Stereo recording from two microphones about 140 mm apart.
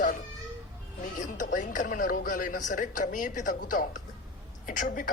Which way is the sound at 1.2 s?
65° left (ahead or behind).